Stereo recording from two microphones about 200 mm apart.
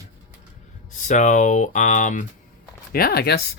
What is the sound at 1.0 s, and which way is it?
Speech, 40° left (ahead or behind).